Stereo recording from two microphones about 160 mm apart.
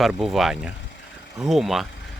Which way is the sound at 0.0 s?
Centre (ahead or behind).